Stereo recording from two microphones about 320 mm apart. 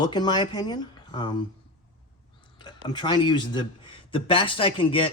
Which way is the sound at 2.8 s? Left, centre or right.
Centre.